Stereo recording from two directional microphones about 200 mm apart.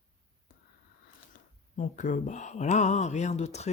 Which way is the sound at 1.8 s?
40° left (ahead or behind).